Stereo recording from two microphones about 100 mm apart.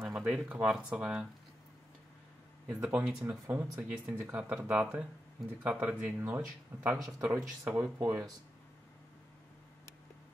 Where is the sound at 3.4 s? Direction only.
20° right (ahead or behind).